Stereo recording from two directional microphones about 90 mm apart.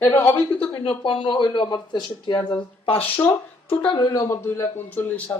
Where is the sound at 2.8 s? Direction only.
90° left.